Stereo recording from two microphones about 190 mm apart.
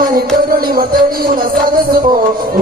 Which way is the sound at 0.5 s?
50° right (ahead or behind).